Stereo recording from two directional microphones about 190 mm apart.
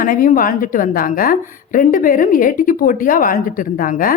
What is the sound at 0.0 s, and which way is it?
A woman's voice, 45° left (ahead or behind).